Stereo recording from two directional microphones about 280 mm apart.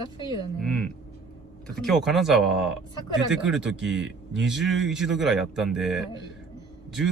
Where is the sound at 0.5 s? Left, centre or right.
Centre.